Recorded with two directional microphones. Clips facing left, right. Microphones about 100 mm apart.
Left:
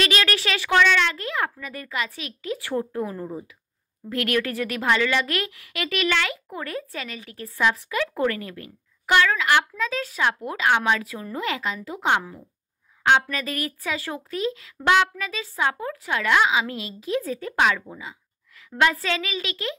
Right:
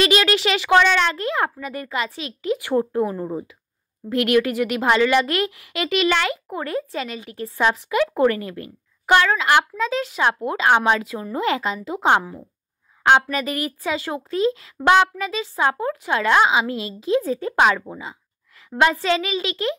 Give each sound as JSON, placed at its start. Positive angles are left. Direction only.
{"t": 0.0, "sound": "speech", "side_deg": -25}
{"t": 0.8, "sound": "speech", "side_deg": -35}